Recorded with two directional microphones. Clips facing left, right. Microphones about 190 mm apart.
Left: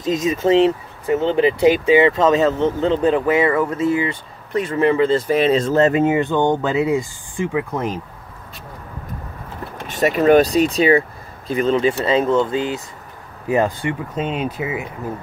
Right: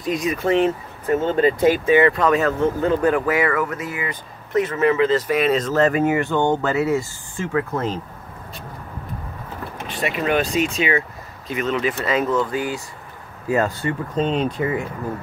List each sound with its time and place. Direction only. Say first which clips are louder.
0.0 s speech: left 3 dB; 25° left (ahead or behind)
9.8 s speech: left 8 dB; 40° left (ahead or behind); by 14.9 s 5° left (ahead or behind)